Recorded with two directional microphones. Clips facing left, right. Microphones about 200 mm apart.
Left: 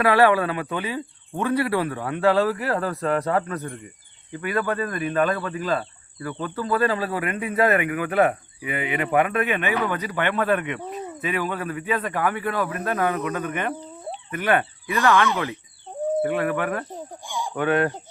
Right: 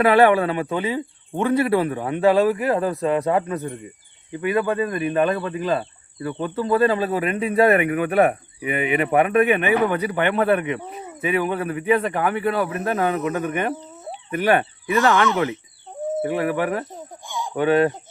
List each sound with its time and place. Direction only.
0.0 s speech: 25° right (ahead or behind)